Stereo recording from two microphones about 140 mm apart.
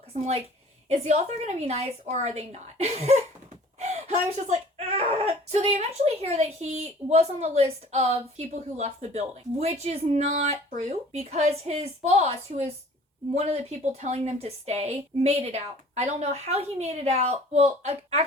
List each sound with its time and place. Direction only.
0.1 s a woman's voice: 45° right (ahead or behind)